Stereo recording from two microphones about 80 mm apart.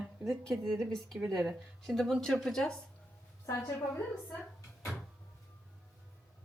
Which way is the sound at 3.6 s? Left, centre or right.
Left.